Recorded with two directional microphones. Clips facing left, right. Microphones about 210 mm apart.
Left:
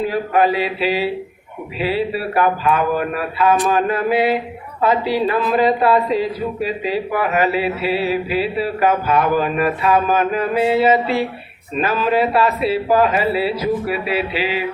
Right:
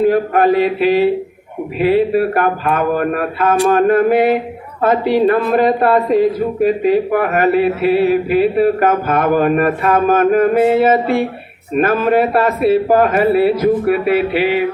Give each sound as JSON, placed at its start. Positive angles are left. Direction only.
{"t": 0.0, "sound": "speech", "side_deg": -50}